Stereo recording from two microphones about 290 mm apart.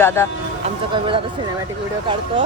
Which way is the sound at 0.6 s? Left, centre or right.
Centre.